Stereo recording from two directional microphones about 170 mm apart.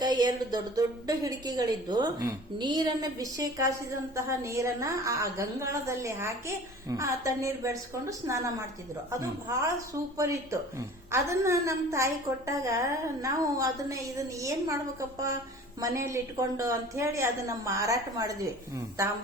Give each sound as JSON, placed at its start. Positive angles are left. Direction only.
{"t": 0.0, "sound": "a woman's voice", "side_deg": -25}
{"t": 15.8, "sound": "a woman's voice", "side_deg": -15}